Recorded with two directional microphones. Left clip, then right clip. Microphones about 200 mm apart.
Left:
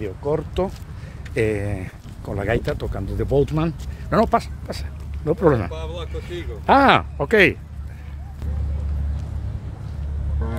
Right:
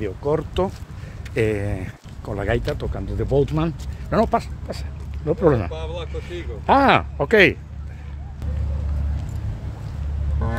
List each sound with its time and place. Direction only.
0.0 s speech: 10° right (ahead or behind); by 5.7 s 10° left (ahead or behind)
5.7 s speech: 55° left (ahead or behind)
6.6 s speech: 15° left (ahead or behind)
6.9 s speech: centre (ahead or behind)